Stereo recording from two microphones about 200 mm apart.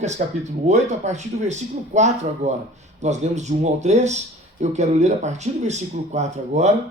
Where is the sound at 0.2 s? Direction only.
40° right (ahead or behind).